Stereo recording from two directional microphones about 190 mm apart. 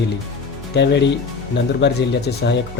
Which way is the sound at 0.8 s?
65° left (ahead or behind).